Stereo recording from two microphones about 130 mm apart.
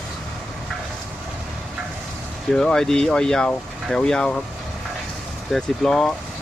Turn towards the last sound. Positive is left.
turn(degrees=5)  # may be behind; listen again after turning